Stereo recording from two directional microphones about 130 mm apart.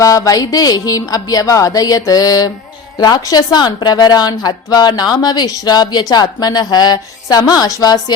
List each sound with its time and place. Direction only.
0.0 s a woman's voice: 25° left (ahead or behind)